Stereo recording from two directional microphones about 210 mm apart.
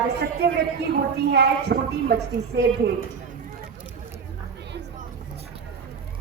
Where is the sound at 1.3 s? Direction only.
55° right (ahead or behind).